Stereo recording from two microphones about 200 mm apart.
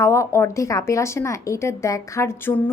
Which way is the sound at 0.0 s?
15° left (ahead or behind).